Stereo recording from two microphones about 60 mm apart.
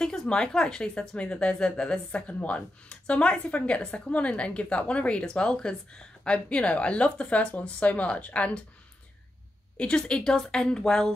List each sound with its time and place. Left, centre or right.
0.0 s a woman's voice: centre
9.8 s a woman's voice: centre